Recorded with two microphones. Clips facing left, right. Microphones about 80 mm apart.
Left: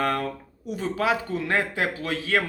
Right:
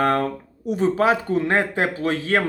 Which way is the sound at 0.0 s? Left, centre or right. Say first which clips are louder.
Right 6 dB; right.